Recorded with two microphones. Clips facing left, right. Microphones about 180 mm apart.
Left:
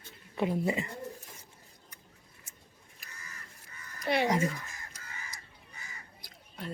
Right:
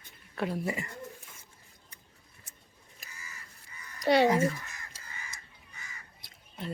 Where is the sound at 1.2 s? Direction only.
35° left (ahead or behind).